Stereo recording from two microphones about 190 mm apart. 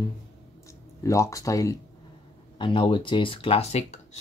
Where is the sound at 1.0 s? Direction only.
15° left (ahead or behind).